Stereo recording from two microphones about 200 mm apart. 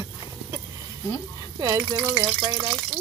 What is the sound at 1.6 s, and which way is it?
Speech, 15° right (ahead or behind).